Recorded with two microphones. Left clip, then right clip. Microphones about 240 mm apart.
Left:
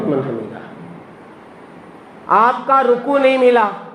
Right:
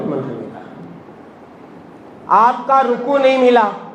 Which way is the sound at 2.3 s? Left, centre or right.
Left.